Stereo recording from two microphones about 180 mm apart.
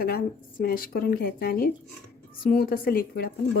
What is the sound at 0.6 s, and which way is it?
A woman's voice, 55° left (ahead or behind).